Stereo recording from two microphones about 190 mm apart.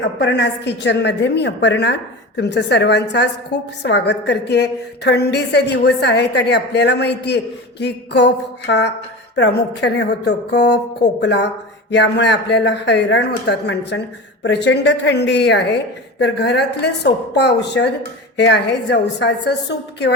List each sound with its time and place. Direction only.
0.2 s a woman's voice: 70° left (ahead or behind)